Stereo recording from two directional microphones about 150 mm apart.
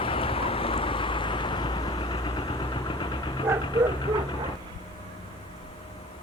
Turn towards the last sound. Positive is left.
turn(degrees=30)  # may be behind; listen again after turning